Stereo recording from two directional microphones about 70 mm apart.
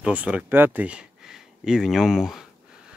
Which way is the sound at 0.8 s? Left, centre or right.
Centre.